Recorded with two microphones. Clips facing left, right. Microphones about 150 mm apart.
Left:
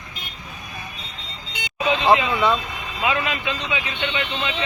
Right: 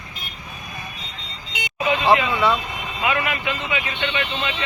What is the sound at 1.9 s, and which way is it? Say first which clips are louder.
A man's voice: even; 20° left (ahead or behind).